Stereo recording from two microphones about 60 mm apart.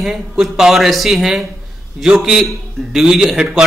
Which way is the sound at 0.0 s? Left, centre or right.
Centre.